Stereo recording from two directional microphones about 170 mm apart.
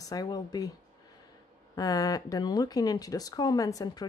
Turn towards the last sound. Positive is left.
turn(degrees=20)  # may be behind; listen again after turning